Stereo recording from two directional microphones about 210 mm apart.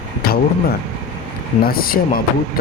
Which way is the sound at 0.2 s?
45° left (ahead or behind).